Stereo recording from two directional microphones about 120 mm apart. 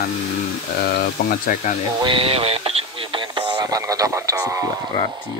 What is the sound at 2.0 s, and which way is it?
Radio, 45° right (ahead or behind).